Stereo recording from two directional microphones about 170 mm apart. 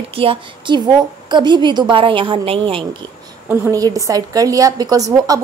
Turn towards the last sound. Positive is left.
turn(degrees=-20)  # may be behind; listen again after turning